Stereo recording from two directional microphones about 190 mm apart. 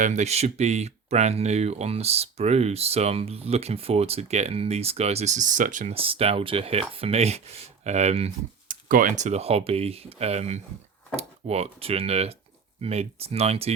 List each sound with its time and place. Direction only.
0.0 s speech: 35° right (ahead or behind)
6.0 s speech: 30° right (ahead or behind)